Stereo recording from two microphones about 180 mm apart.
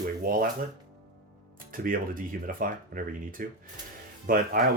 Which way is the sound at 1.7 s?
50° right (ahead or behind).